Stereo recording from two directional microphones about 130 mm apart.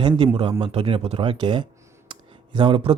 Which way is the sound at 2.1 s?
40° right (ahead or behind).